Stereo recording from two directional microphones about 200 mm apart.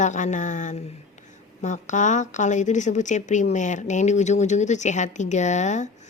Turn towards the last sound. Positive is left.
turn(degrees=35)  # may be behind; listen again after turning